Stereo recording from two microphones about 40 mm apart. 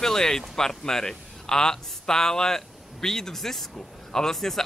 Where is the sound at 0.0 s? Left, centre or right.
Centre.